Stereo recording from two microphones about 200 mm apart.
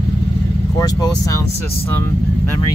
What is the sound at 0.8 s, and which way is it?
Speech, 20° left (ahead or behind).